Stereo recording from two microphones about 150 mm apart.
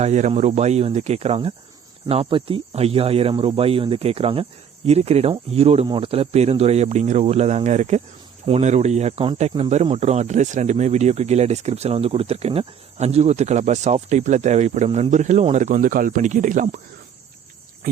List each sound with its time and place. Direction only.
0.0 s speech: 50° right (ahead or behind)
14.8 s speech: 35° right (ahead or behind)
15.1 s speech: 50° right (ahead or behind)